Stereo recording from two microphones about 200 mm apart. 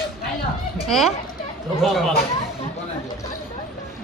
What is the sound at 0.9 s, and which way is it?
A woman's voice, centre (ahead or behind).